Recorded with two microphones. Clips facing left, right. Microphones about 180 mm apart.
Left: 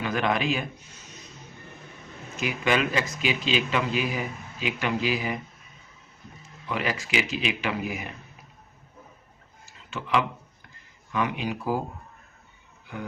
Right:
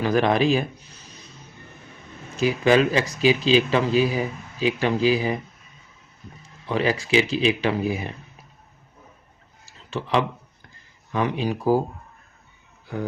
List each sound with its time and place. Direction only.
0.0 s a man's voice: 35° right (ahead or behind)
2.3 s speech: 35° right (ahead or behind)
6.7 s speech: 30° right (ahead or behind)
9.6 s a sound: 35° right (ahead or behind)
11.1 s speech: 35° right (ahead or behind)